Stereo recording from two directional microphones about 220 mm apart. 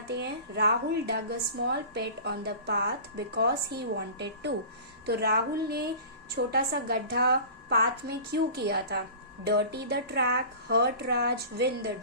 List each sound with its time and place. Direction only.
0.1 s a woman's voice: 50° right (ahead or behind)